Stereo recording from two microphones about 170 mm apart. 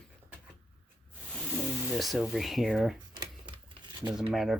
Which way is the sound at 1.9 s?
Centre (ahead or behind).